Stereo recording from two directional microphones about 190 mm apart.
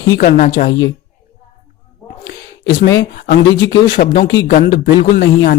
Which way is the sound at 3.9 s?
50° left (ahead or behind).